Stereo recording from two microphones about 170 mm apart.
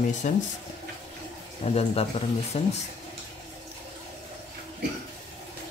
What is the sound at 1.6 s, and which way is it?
Speech, 35° left (ahead or behind).